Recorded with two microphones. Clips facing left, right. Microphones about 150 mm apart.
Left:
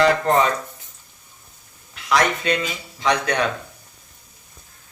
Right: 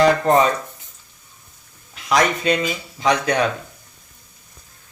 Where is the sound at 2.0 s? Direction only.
35° right (ahead or behind).